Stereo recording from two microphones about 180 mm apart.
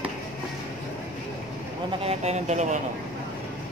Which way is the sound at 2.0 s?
35° right (ahead or behind).